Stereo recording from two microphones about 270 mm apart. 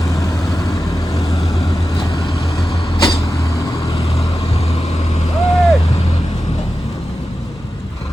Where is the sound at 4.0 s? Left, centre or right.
Left.